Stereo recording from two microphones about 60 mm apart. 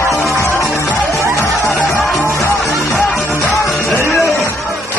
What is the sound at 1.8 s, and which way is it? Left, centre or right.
Music, left.